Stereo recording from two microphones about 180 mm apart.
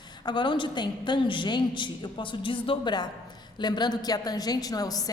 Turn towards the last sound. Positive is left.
turn(degrees=20)  # may be behind; listen again after turning